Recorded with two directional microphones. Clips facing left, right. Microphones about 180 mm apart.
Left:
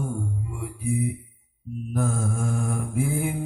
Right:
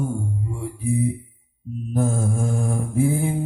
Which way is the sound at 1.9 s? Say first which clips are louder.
Right 4 dB; 25° right (ahead or behind).